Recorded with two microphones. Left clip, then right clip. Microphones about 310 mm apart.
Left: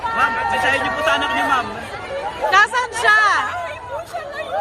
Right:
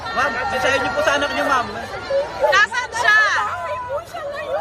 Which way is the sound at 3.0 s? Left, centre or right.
Centre.